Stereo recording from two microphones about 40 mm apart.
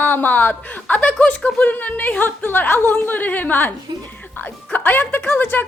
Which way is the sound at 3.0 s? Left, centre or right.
Left.